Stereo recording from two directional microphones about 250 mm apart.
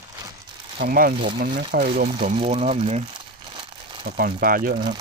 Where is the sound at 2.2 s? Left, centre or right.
Right.